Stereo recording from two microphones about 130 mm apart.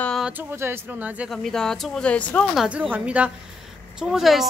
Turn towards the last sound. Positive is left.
turn(degrees=0)  # may be behind; listen again after turning